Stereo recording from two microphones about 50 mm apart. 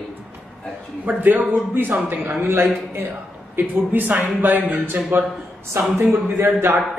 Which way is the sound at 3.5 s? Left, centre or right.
Right.